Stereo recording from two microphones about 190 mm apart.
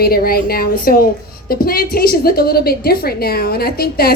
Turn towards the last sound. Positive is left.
turn(degrees=55)  # may be behind; listen again after turning